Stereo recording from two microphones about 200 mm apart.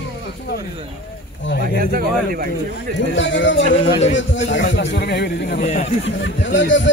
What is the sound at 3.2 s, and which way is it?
A man's voice, 65° left (ahead or behind).